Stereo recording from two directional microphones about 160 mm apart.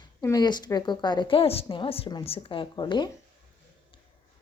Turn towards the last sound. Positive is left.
turn(degrees=25)  # may be behind; listen again after turning